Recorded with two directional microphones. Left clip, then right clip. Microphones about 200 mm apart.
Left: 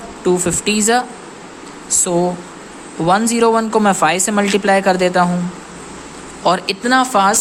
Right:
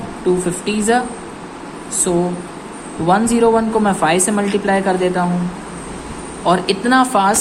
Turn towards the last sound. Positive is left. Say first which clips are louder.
# even
turn(degrees=15)  # may be behind; listen again after turning